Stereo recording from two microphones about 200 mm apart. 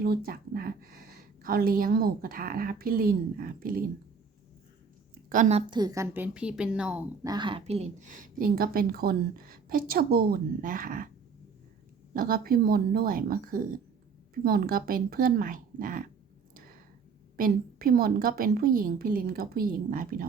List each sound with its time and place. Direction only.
0.0 s a woman's voice: 50° right (ahead or behind)
5.3 s a woman's voice: 35° right (ahead or behind)
5.8 s a woman's voice: 15° right (ahead or behind)
7.3 s a woman's voice: 25° right (ahead or behind); by 11.1 s 45° right (ahead or behind)
12.1 s a woman's voice: 45° right (ahead or behind)
17.3 s a woman's voice: 45° right (ahead or behind)